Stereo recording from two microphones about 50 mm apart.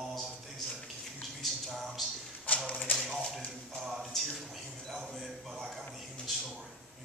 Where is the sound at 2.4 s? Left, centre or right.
Left.